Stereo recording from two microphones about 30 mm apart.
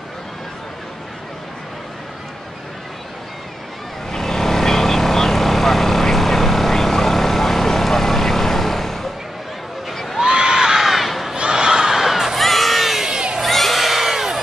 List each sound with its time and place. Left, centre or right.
4.1 s vehicle: centre
10.2 s a sound: right
10.8 s crowd: centre
11.3 s crowd: right
12.0 s crowd: centre
12.4 s crowd: centre